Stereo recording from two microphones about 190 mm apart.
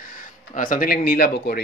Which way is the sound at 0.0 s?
45° left (ahead or behind).